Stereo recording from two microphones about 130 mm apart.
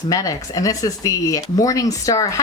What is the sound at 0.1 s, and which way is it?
Speech, 25° left (ahead or behind).